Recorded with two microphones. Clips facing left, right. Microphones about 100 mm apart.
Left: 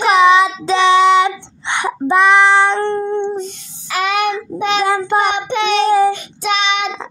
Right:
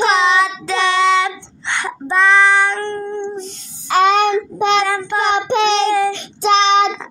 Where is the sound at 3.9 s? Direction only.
30° right (ahead or behind).